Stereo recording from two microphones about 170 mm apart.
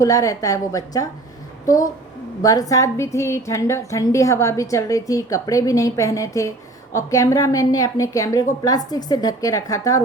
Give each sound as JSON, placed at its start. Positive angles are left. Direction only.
{"t": 0.0, "sound": "a woman's voice", "side_deg": 20}
{"t": 2.4, "sound": "a woman's voice", "side_deg": 20}